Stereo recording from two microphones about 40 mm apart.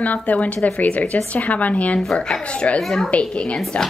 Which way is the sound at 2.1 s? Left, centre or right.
Centre.